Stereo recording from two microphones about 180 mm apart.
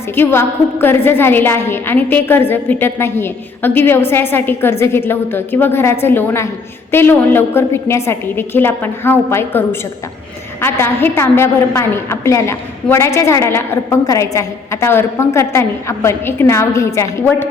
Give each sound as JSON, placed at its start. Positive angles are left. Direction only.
{"t": 0.2, "sound": "a woman's voice", "side_deg": 10}